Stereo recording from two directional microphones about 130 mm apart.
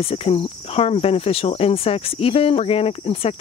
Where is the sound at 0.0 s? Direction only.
45° left (ahead or behind).